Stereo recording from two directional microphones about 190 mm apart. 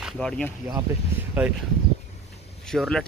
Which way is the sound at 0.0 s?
5° left (ahead or behind).